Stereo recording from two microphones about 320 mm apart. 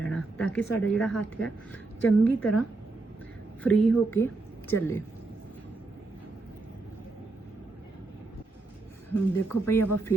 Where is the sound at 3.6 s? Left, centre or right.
Centre.